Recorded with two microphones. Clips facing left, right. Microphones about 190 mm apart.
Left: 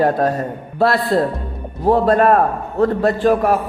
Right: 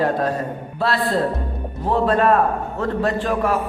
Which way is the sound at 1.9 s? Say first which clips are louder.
Left 4 dB; 45° left (ahead or behind).